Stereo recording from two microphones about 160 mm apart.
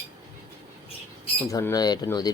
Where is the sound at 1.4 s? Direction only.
20° left (ahead or behind).